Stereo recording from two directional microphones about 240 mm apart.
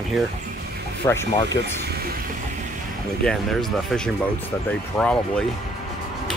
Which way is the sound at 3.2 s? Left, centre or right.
Centre.